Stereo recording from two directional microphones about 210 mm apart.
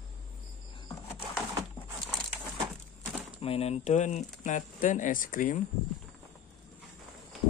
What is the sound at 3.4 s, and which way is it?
Speech, 30° left (ahead or behind).